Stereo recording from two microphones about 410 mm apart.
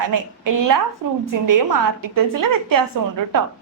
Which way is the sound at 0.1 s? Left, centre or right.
Right.